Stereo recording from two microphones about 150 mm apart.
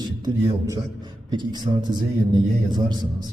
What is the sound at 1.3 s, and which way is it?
A man's voice, 30° right (ahead or behind).